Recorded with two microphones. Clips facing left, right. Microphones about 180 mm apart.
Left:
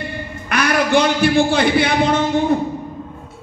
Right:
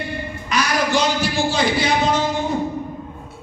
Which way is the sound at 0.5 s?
60° left (ahead or behind).